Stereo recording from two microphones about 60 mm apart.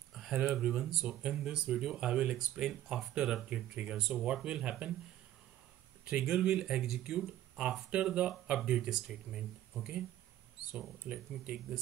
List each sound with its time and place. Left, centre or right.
0.1 s a sound: centre
0.6 s speech: centre
6.0 s speech: centre
11.1 s speech: centre